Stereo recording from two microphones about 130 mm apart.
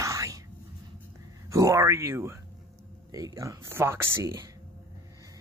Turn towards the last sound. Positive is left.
turn(degrees=-20)  # may be behind; listen again after turning